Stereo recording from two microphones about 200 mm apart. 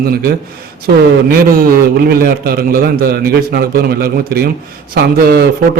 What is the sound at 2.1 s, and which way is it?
A man's voice, 50° right (ahead or behind).